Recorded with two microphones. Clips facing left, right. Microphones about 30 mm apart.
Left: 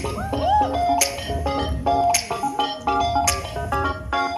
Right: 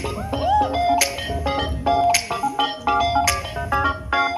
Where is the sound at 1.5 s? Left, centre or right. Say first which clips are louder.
Right 1 dB; right.